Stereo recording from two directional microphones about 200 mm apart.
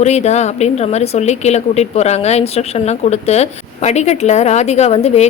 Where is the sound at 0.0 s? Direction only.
35° left (ahead or behind).